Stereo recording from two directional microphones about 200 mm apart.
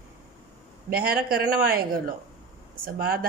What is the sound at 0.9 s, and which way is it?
A woman's voice, 50° right (ahead or behind).